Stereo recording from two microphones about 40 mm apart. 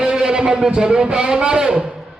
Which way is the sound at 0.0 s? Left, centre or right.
Centre.